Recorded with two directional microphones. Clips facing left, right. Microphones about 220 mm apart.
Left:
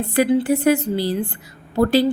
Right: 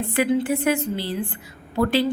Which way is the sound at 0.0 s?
40° left (ahead or behind).